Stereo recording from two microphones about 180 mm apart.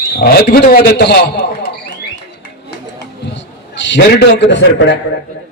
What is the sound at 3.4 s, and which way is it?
A man's voice, 85° left.